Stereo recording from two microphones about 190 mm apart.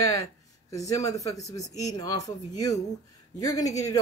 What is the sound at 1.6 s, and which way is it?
Speech, 35° left (ahead or behind).